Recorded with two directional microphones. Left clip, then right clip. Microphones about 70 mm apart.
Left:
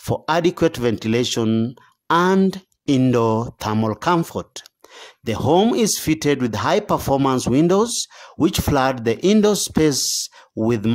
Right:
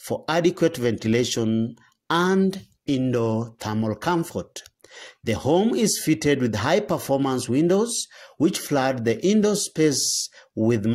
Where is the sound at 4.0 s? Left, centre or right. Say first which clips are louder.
Left 4 dB; left.